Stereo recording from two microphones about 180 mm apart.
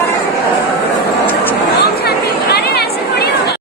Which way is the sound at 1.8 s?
60° left (ahead or behind).